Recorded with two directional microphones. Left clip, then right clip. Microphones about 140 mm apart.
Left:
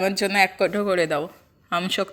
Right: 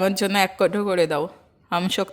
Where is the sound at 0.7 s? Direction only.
30° right (ahead or behind).